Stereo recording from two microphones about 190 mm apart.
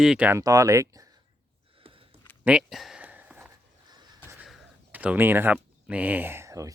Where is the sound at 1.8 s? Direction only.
30° right (ahead or behind).